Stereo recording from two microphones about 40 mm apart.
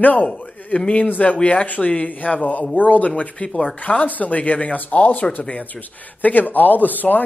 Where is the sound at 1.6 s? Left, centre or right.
Left.